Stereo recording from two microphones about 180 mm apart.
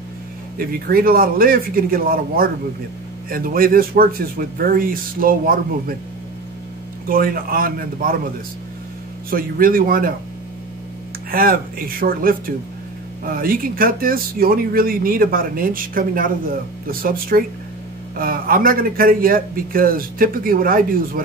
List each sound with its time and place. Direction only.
0.6 s a man's voice: 55° right (ahead or behind)
7.1 s a man's voice: 55° right (ahead or behind)
9.3 s a man's voice: 50° right (ahead or behind)
11.2 s a man's voice: 55° right (ahead or behind)